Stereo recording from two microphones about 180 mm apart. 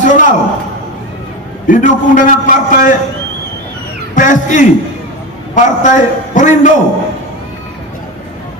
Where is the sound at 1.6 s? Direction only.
45° left (ahead or behind).